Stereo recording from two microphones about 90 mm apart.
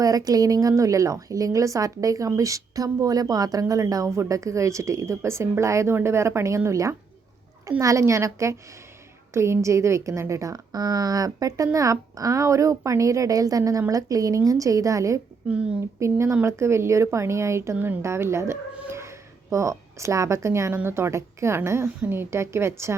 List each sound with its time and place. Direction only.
0.0 s speech: 40° right (ahead or behind)
15.4 s a woman's voice: 10° right (ahead or behind)
16.0 s speech: 30° right (ahead or behind)
18.9 s babbling: 30° right (ahead or behind)
20.0 s a woman's voice: 35° right (ahead or behind)